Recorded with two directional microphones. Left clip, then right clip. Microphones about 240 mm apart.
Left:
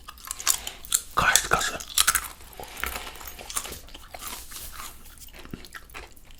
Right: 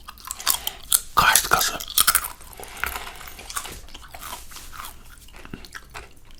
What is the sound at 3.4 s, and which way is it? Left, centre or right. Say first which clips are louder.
Biting: right 2 dB; left.